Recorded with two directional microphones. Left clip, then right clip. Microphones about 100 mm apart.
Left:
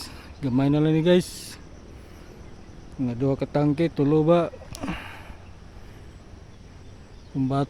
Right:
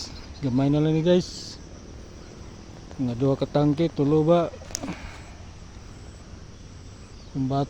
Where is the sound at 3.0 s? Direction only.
25° left (ahead or behind).